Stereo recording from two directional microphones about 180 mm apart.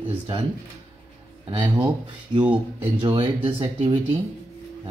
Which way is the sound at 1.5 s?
25° right (ahead or behind).